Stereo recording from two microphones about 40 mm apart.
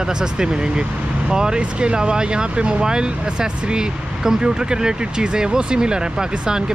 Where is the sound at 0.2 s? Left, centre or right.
Centre.